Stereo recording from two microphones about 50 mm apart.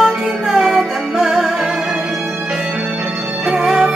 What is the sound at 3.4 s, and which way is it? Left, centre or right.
Music, centre.